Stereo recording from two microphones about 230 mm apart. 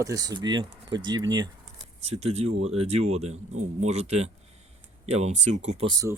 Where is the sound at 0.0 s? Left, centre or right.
Centre.